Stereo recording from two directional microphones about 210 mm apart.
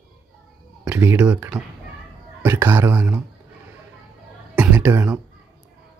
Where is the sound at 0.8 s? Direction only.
5° right (ahead or behind).